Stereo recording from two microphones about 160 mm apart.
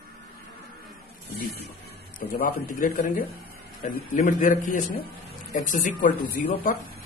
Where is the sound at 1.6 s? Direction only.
75° left (ahead or behind); by 6.4 s 55° left (ahead or behind).